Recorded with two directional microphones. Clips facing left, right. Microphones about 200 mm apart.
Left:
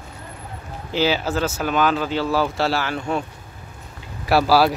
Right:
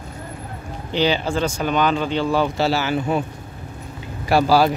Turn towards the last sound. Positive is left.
turn(degrees=5)  # may be behind; listen again after turning